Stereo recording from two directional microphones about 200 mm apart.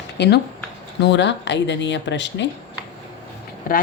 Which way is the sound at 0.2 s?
60° left (ahead or behind).